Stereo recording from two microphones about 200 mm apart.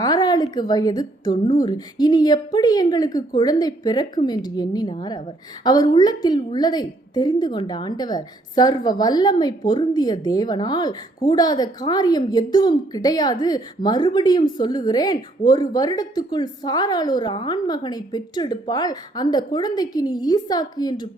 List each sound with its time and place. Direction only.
0.0 s a woman's voice: 20° left (ahead or behind)